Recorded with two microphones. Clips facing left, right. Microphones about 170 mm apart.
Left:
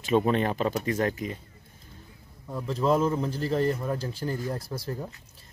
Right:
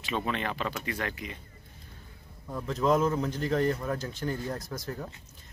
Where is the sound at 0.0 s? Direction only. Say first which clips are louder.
Left 8 dB; 45° left (ahead or behind).